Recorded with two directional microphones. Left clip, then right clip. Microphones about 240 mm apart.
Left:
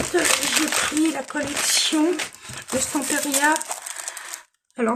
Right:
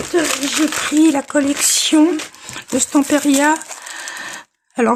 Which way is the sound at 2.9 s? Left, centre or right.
Right.